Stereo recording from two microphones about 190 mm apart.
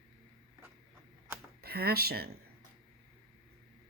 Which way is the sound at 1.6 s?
55° right (ahead or behind).